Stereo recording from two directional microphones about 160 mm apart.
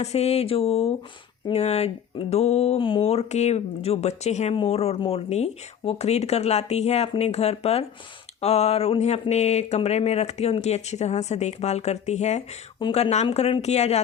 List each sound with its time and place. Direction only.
0.0 s speech: 40° left (ahead or behind)